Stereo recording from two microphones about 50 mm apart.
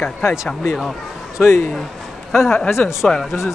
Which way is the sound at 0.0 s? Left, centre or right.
Left.